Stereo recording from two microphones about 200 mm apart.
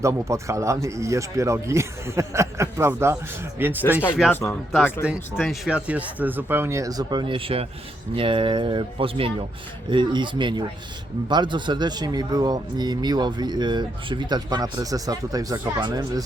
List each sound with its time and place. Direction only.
0.0 s speech: 15° right (ahead or behind)
4.3 s speech: 10° left (ahead or behind)
5.0 s speech: 5° right (ahead or behind); by 16.2 s 20° right (ahead or behind)